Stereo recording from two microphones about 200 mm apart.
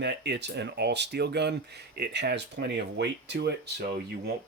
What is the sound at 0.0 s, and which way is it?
Speech, 60° right (ahead or behind).